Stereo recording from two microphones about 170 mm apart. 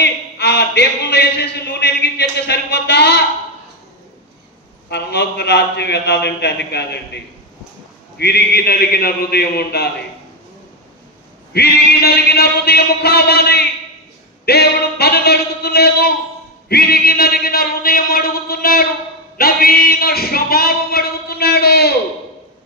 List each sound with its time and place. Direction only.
0.0 s a man's voice: 80° left
4.8 s a man's voice: 80° left
8.2 s a man's voice: 70° left (ahead or behind)
11.5 s a man's voice: 70° left (ahead or behind)